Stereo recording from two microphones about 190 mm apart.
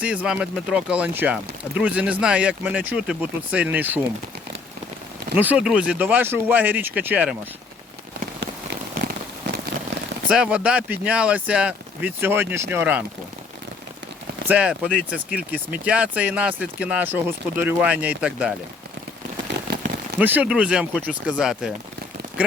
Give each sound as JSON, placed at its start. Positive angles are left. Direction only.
{"t": 0.0, "sound": "speech", "side_deg": -5}
{"t": 5.4, "sound": "speech", "side_deg": -5}
{"t": 9.0, "sound": "rain on surface", "side_deg": -65}
{"t": 10.2, "sound": "speech", "side_deg": -5}
{"t": 14.4, "sound": "speech", "side_deg": -5}
{"t": 20.1, "sound": "speech", "side_deg": -10}